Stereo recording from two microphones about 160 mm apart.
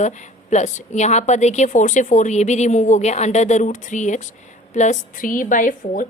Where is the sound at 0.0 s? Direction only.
50° left (ahead or behind).